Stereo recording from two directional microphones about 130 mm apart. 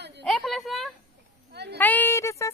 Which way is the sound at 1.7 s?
15° left (ahead or behind).